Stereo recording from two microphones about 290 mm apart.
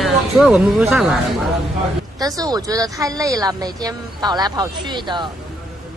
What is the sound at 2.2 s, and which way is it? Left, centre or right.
Speech, centre.